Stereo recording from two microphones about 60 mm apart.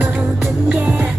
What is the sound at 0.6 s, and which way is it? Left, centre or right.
Music, right.